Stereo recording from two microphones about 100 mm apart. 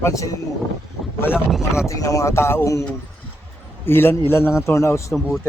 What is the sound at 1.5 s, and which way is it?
Speech, 5° right (ahead or behind).